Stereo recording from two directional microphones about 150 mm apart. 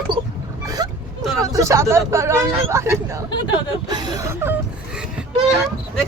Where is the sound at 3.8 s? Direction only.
30° right (ahead or behind).